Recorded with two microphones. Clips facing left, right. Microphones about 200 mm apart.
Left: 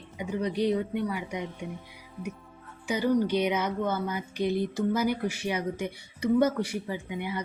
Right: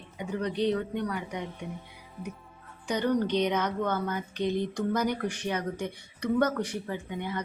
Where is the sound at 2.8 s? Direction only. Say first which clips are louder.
Left 2 dB; 5° left (ahead or behind).